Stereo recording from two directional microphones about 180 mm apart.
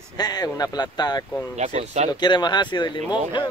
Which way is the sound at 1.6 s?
40° right (ahead or behind).